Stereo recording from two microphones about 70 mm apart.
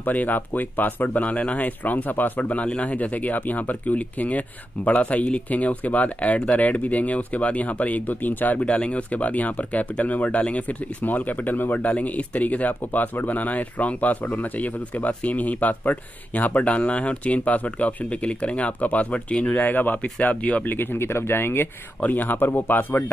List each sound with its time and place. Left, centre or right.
0.0 s speech: left